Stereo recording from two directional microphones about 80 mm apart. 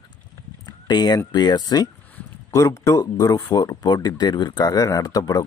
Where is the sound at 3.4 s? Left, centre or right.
Left.